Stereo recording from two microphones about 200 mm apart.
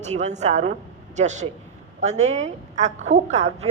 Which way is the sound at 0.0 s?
35° right (ahead or behind).